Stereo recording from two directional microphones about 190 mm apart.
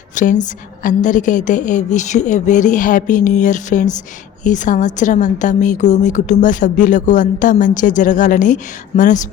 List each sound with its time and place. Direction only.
0.1 s a woman's voice: 40° left (ahead or behind)